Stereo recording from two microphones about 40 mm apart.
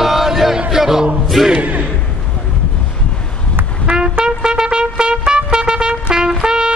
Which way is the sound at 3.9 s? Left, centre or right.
Right.